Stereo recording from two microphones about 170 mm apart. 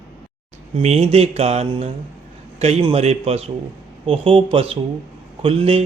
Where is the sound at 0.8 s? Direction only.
40° right (ahead or behind).